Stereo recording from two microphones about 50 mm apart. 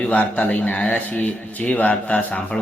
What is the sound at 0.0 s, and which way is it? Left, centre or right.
Speech, left.